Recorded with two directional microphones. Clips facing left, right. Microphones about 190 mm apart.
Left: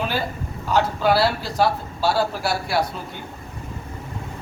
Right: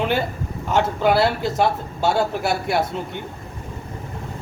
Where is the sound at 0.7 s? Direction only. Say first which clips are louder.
Right 1 dB; 20° right (ahead or behind).